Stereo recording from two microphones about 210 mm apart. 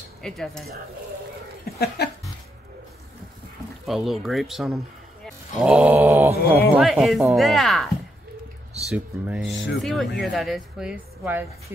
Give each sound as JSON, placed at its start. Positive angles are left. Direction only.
{"t": 0.2, "sound": "speech", "side_deg": 5}
{"t": 1.7, "sound": "a sound", "side_deg": 45}
{"t": 3.8, "sound": "speech", "side_deg": 0}